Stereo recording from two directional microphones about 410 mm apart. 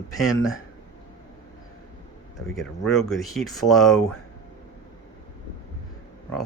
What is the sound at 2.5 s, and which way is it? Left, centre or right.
Speech, centre.